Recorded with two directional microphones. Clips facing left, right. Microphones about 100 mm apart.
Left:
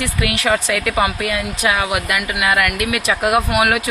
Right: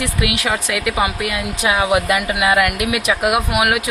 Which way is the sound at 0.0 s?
15° right (ahead or behind).